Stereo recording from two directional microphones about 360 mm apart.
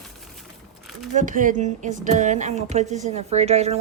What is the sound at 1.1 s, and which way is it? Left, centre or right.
Speech, right.